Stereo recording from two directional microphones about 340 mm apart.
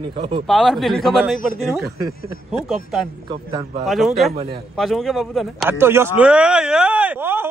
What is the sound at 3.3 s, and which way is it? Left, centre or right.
Speech, centre.